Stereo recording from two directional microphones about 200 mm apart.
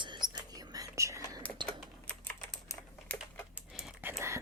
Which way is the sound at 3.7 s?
Centre (ahead or behind).